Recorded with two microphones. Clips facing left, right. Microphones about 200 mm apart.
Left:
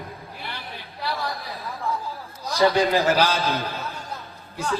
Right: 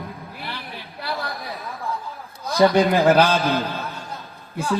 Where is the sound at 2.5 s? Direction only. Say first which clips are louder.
Right 3 dB; 55° right (ahead or behind).